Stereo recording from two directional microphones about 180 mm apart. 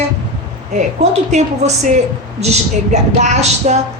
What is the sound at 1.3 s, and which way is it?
Speech, 40° right (ahead or behind).